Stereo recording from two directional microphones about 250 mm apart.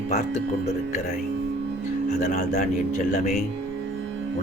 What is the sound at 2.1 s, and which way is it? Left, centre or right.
Speech, left.